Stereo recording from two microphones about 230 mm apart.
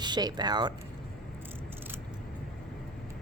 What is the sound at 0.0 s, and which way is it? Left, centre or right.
Speech, centre.